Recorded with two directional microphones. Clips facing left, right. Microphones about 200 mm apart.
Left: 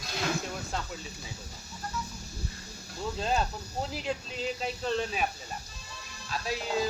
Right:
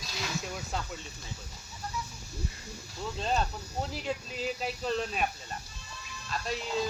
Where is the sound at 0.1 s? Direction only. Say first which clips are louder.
Left 7 dB; 55° left (ahead or behind).